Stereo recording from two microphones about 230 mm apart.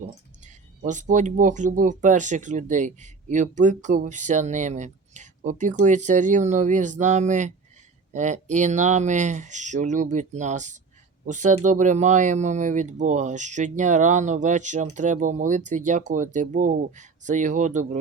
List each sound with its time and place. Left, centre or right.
0.0 s speech: right